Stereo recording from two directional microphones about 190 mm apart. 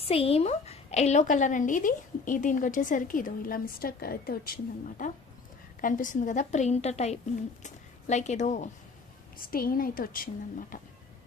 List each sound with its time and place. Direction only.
0.0 s a woman's voice: 30° left (ahead or behind)
9.5 s a woman's voice: 50° left (ahead or behind)